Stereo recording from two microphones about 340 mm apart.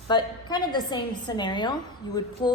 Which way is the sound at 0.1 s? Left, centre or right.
Centre.